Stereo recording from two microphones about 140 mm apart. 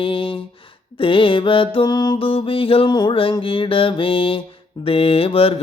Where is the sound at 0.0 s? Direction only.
40° left (ahead or behind).